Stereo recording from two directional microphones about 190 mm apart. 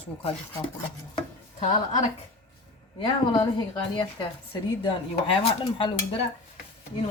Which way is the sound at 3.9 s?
25° left (ahead or behind).